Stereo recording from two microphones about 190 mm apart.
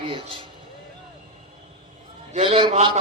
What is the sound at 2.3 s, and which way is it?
Speech, 35° right (ahead or behind).